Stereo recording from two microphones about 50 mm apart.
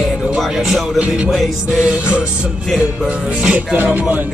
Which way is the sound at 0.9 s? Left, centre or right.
Right.